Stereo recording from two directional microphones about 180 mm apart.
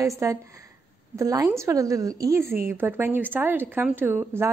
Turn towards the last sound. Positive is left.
turn(degrees=-15)  # may be behind; listen again after turning